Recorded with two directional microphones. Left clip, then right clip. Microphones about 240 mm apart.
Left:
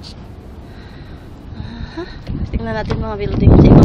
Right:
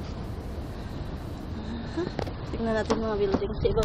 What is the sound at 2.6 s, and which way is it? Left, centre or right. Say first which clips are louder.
Speech: left 4 dB; centre.